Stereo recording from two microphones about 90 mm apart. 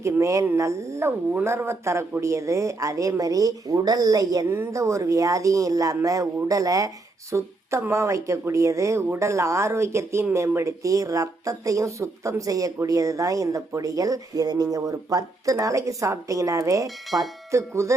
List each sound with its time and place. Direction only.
0.0 s speech: 35° right (ahead or behind)
4.4 s speech: 25° right (ahead or behind)